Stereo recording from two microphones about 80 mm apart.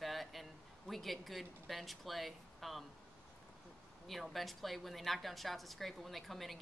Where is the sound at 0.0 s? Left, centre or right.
Centre.